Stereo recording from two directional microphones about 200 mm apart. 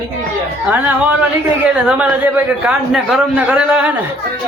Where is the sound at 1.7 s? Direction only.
5° right (ahead or behind).